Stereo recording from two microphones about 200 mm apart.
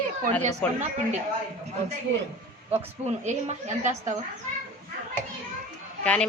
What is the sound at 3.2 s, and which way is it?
Speech, 35° right (ahead or behind).